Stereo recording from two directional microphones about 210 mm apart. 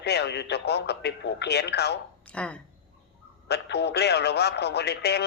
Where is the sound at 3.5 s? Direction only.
55° left (ahead or behind).